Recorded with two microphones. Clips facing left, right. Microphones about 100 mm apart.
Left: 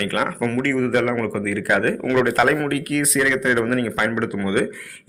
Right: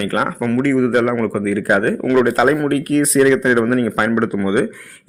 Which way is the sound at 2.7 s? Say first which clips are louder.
Right 6 dB; 35° right (ahead or behind).